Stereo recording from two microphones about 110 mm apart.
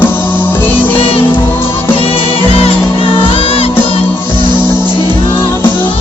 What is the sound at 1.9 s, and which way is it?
Music, 60° left (ahead or behind).